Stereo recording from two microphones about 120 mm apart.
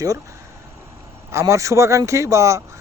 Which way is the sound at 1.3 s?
25° right (ahead or behind).